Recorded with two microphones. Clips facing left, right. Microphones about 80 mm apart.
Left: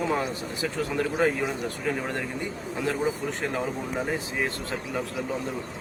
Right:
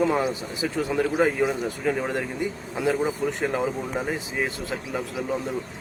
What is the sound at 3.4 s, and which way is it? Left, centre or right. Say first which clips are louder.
Speech: right 4 dB; centre.